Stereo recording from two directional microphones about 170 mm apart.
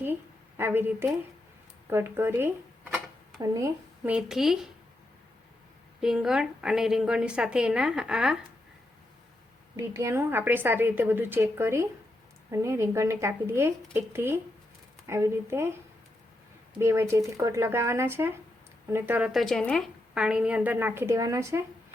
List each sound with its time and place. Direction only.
0.0 s a sound: 10° right (ahead or behind)
1.9 s speech: 15° right (ahead or behind)
4.1 s a woman's voice: centre (ahead or behind)
6.0 s a woman's voice: 5° right (ahead or behind)
9.7 s a woman's voice: 15° right (ahead or behind)
16.7 s a woman's voice: 15° right (ahead or behind)